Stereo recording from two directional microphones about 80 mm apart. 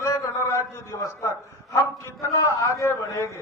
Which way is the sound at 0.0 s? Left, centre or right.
Left.